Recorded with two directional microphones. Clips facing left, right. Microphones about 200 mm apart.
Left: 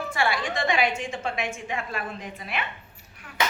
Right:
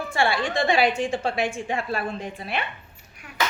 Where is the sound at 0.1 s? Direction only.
30° right (ahead or behind).